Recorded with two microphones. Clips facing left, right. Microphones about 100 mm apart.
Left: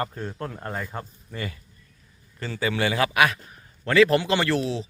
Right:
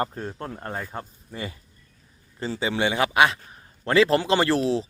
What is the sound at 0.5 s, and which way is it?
A man's voice, 15° right (ahead or behind).